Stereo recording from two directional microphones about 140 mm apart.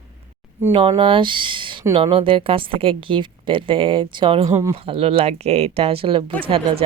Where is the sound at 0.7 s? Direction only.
40° right (ahead or behind).